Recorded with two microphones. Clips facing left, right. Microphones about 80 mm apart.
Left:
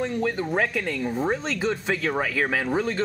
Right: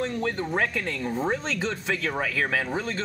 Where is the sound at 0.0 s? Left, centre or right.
Centre.